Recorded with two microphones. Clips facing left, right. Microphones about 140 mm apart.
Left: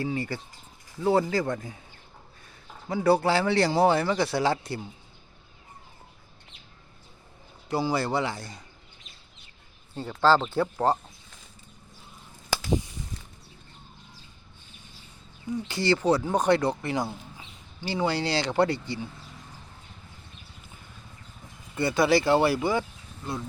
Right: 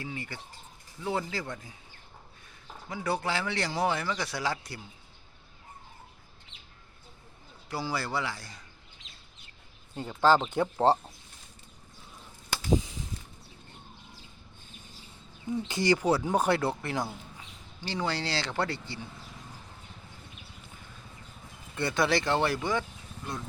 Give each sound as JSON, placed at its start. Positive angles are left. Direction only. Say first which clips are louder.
{"t": 0.0, "sound": "speech", "louder": "left 9 dB", "side_deg": 35}
{"t": 2.9, "sound": "speech", "louder": "left 9 dB", "side_deg": 35}
{"t": 7.7, "sound": "speech", "louder": "left 7 dB", "side_deg": 20}
{"t": 9.9, "sound": "speech", "louder": "left 2 dB", "side_deg": -15}
{"t": 15.6, "sound": "speech", "louder": "left 2 dB", "side_deg": -20}
{"t": 21.8, "sound": "speech", "louder": "left 5 dB", "side_deg": 5}